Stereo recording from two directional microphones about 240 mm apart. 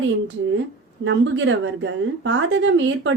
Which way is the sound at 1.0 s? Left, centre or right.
Right.